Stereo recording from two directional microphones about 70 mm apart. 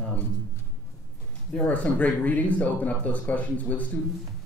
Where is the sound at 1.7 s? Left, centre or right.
Left.